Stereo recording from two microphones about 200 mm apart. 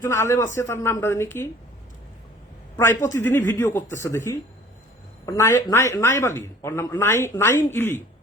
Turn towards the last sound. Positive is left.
turn(degrees=10)  # may be behind; listen again after turning